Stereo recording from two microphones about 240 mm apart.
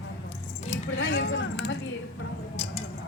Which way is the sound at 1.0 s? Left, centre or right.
Left.